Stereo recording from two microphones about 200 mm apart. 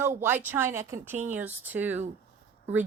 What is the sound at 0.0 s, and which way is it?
Speech, 10° right (ahead or behind).